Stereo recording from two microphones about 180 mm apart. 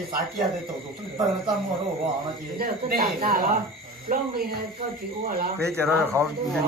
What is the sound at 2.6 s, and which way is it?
Speech, 55° right (ahead or behind).